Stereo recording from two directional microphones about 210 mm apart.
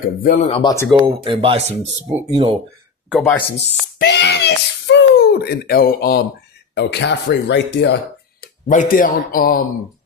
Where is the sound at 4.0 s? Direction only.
55° left (ahead or behind).